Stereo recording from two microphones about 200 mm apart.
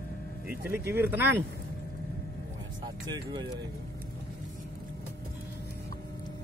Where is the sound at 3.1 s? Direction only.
20° right (ahead or behind).